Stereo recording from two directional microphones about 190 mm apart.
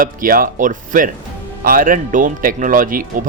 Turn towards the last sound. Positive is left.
turn(degrees=-45)  # may be behind; listen again after turning